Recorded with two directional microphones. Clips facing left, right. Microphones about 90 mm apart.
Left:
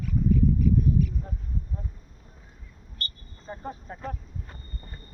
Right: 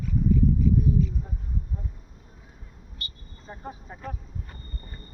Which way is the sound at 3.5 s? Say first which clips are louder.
Left 3 dB; 5° right (ahead or behind).